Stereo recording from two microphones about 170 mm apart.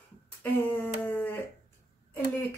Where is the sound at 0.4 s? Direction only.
10° left (ahead or behind).